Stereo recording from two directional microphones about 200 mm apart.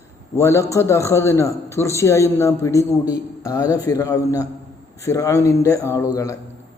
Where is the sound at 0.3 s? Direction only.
15° left (ahead or behind).